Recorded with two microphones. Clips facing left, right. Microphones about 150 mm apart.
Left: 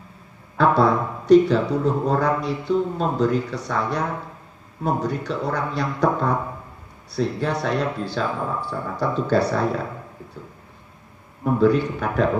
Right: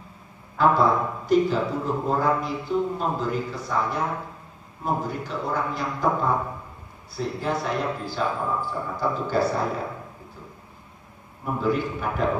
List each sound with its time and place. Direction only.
0.6 s speech: 75° left (ahead or behind)
11.6 s speech: 75° left (ahead or behind)